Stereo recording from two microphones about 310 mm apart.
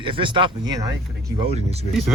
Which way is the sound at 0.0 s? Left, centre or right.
Centre.